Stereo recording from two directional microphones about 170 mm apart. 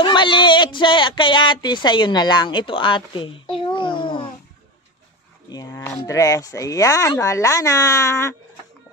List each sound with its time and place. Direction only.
0.0 s speech: 30° left (ahead or behind)
5.5 s speech: 20° left (ahead or behind)